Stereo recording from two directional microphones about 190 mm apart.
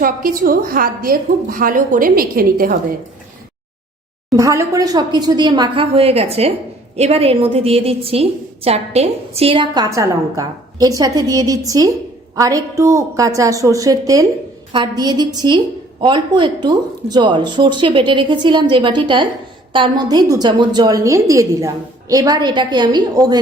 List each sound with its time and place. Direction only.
0.0 s a woman's voice: 50° right (ahead or behind)
4.3 s a woman's voice: 15° right (ahead or behind)